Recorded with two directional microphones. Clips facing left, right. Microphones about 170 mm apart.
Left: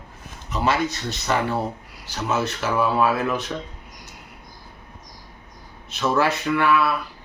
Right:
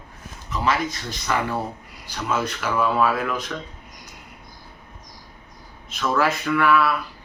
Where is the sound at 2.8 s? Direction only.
25° left (ahead or behind).